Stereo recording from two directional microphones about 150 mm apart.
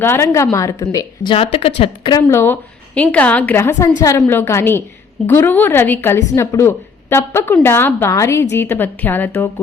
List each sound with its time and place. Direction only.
0.0 s a woman's voice: 15° left (ahead or behind)
1.3 s speech: 40° left (ahead or behind)
2.1 s a woman's voice: 20° left (ahead or behind)